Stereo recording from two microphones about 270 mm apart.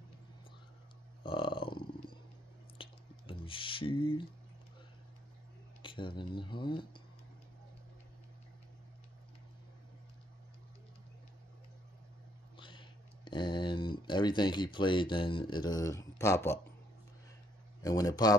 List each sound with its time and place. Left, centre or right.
1.2 s burping: centre
2.8 s drip: centre
5.8 s speech: centre
12.5 s speech: centre
17.8 s speech: centre